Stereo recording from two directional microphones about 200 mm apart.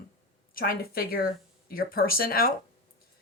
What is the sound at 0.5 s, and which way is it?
A woman's voice, 50° left (ahead or behind).